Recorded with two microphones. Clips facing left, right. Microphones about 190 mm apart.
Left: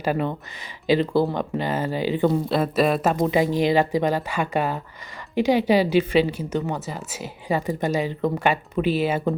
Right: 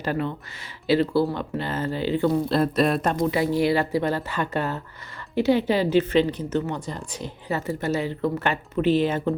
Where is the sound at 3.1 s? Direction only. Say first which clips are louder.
Left 2 dB; 20° left (ahead or behind).